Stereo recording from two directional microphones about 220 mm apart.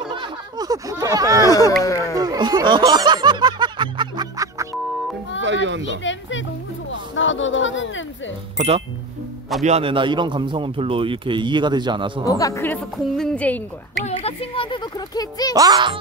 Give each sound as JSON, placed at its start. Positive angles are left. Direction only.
{"t": 0.1, "sound": "a sound", "side_deg": -20}
{"t": 1.9, "sound": "a woman's voice", "side_deg": 15}
{"t": 2.1, "sound": "music", "side_deg": -20}
{"t": 5.4, "sound": "children playing", "side_deg": -55}
{"t": 5.9, "sound": "a sound", "side_deg": 55}
{"t": 8.5, "sound": "a man's voice", "side_deg": -30}
{"t": 12.3, "sound": "a woman's voice", "side_deg": 15}
{"t": 14.0, "sound": "a sound", "side_deg": 25}
{"t": 15.5, "sound": "music", "side_deg": -15}